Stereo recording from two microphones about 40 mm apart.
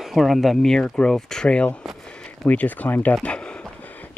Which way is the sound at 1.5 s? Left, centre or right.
Left.